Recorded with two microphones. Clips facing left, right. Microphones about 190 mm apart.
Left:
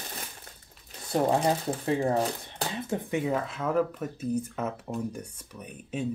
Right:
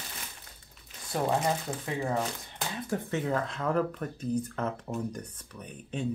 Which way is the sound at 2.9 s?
15° left (ahead or behind).